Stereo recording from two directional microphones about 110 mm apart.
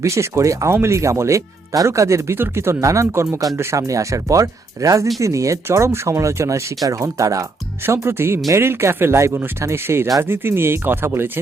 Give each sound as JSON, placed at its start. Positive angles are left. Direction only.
{"t": 0.0, "sound": "speech", "side_deg": -25}